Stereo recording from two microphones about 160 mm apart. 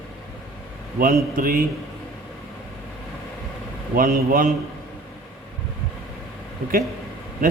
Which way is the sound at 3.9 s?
65° right (ahead or behind).